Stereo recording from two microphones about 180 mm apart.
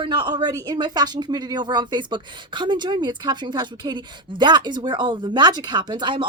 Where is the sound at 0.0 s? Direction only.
25° right (ahead or behind).